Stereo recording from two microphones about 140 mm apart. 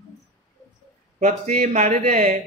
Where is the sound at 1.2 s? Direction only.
60° right (ahead or behind).